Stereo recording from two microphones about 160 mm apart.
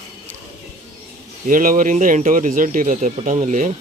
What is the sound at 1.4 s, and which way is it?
Speech, 60° right (ahead or behind).